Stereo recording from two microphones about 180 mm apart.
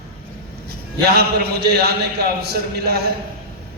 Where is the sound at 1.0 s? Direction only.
60° right (ahead or behind).